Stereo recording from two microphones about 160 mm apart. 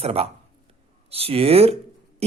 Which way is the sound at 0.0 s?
40° right (ahead or behind).